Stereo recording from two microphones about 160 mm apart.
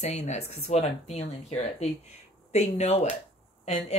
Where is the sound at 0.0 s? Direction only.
45° left (ahead or behind).